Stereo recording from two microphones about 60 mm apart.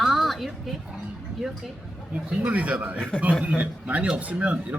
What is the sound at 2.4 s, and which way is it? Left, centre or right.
Speech, right.